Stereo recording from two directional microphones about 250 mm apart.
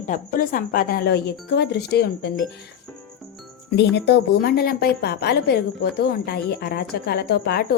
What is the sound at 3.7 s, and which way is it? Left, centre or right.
A woman's voice, left.